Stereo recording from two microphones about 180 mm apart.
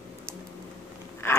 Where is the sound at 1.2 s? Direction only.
15° left (ahead or behind).